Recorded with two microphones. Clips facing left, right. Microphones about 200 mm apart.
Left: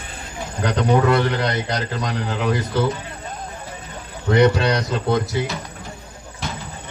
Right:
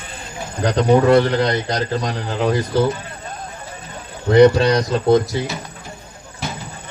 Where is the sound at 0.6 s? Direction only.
35° right (ahead or behind).